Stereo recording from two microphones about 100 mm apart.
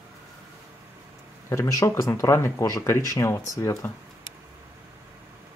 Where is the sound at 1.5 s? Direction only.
30° left (ahead or behind).